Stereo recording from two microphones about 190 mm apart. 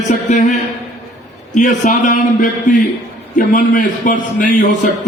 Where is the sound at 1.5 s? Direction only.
40° left (ahead or behind).